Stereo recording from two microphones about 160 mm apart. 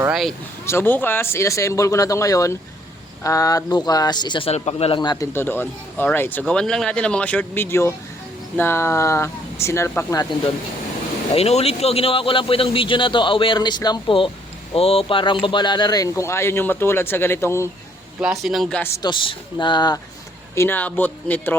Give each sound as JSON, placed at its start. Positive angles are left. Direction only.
{"t": 0.1, "sound": "speech", "side_deg": 0}
{"t": 0.6, "sound": "speech", "side_deg": 15}
{"t": 4.9, "sound": "speech", "side_deg": 25}
{"t": 5.3, "sound": "speech", "side_deg": 15}
{"t": 10.2, "sound": "speech", "side_deg": 30}
{"t": 11.3, "sound": "speech", "side_deg": 40}
{"t": 18.2, "sound": "speech", "side_deg": 0}
{"t": 19.0, "sound": "speech", "side_deg": 30}
{"t": 20.6, "sound": "speech", "side_deg": 10}